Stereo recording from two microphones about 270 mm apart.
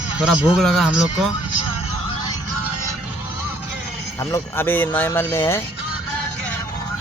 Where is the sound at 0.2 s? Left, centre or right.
Centre.